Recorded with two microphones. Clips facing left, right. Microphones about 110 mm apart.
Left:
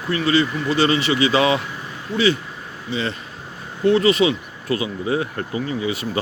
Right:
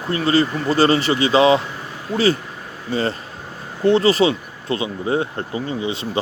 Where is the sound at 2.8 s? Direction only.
45° right (ahead or behind).